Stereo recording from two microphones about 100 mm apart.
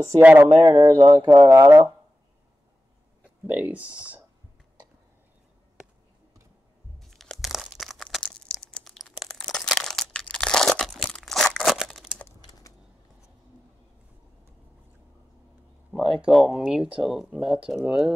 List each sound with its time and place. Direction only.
0.2 s speech: 15° right (ahead or behind)
0.7 s speech: 35° right (ahead or behind)
1.5 s speech: 25° right (ahead or behind)
3.4 s speech: 15° right (ahead or behind)
7.1 s a sound: centre (ahead or behind)
8.2 s crumpling: 10° left (ahead or behind)
15.9 s speech: 5° right (ahead or behind)